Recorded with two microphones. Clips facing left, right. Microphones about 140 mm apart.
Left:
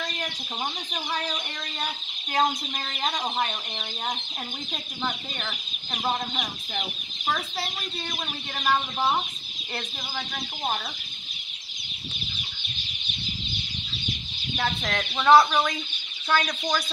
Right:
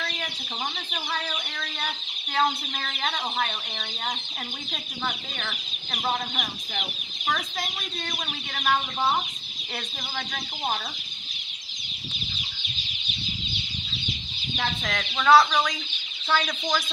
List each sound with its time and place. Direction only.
2.3 s speech: 15° left (ahead or behind)
5.9 s speech: centre (ahead or behind)
14.5 s speech: 10° left (ahead or behind)
16.3 s speech: centre (ahead or behind)